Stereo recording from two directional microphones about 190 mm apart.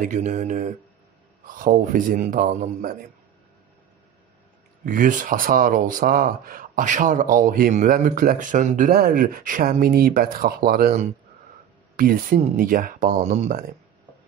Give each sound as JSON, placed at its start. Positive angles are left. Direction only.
{"t": 0.0, "sound": "speech", "side_deg": -40}
{"t": 4.8, "sound": "speech", "side_deg": -45}